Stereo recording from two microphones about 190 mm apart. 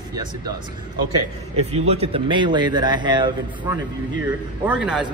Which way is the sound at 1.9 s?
30° right (ahead or behind).